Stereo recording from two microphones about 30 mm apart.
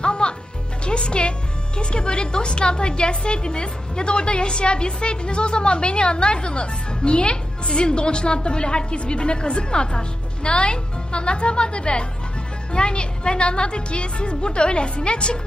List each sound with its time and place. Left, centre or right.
0.0 s music: left
0.9 s a woman's voice: left